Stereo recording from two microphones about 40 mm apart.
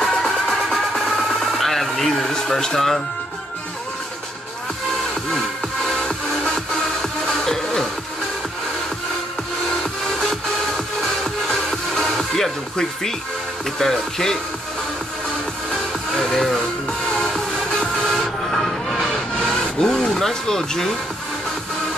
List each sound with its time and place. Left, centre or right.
0.1 s music: centre
2.3 s speech: centre
5.9 s music: centre
11.4 s music: centre
13.7 s speech: centre
16.1 s music: centre
17.6 s music: left
18.1 s music: centre
19.4 s vehicle: centre